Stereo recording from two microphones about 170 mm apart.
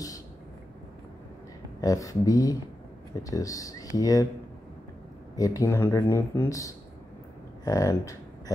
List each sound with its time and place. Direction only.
1.8 s speech: 20° left (ahead or behind)
5.3 s speech: 20° left (ahead or behind)